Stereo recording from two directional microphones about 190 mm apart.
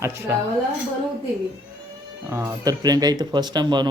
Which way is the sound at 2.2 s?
10° right (ahead or behind).